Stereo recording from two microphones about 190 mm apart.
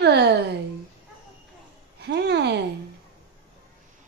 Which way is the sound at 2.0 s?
60° right (ahead or behind).